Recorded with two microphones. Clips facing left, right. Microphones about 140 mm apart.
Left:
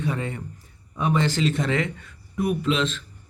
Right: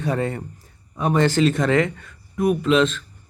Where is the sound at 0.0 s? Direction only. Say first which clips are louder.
Right 5 dB; 40° right (ahead or behind).